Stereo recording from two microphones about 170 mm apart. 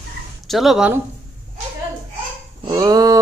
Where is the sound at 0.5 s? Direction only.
Centre (ahead or behind).